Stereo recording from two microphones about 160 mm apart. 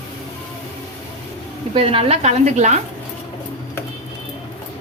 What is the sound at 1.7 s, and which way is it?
Speech, 35° right (ahead or behind).